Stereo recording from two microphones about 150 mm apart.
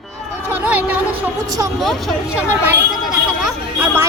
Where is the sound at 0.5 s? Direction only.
10° right (ahead or behind).